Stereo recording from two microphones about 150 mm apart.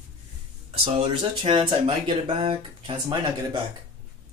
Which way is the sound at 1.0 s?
30° right (ahead or behind).